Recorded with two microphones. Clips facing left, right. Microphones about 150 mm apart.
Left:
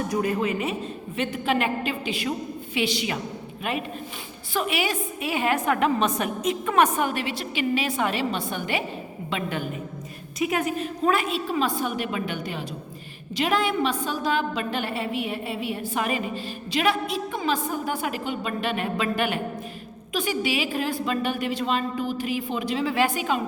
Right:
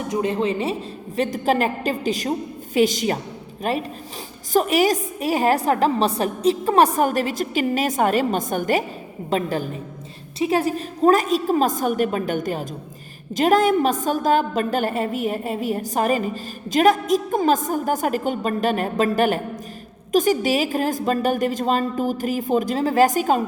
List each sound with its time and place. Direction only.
0.1 s a woman's voice: 25° right (ahead or behind); by 23.4 s 40° right (ahead or behind)